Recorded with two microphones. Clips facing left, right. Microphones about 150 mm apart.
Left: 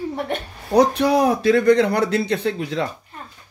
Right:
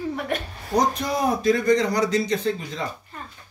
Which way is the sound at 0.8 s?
70° left (ahead or behind).